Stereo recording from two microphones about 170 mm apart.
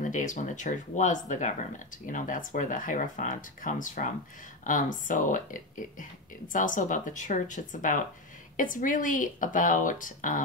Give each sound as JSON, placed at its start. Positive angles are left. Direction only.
{"t": 0.0, "sound": "speech", "side_deg": 50}